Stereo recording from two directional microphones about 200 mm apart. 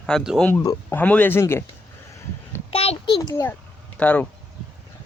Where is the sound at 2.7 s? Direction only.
30° left (ahead or behind).